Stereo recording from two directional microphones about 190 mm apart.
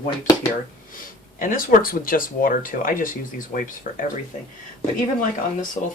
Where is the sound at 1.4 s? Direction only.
45° left (ahead or behind).